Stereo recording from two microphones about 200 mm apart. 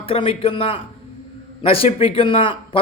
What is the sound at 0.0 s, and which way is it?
A man's voice, 25° left (ahead or behind).